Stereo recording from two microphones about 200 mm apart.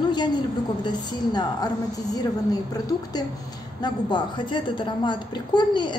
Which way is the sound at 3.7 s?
20° left (ahead or behind).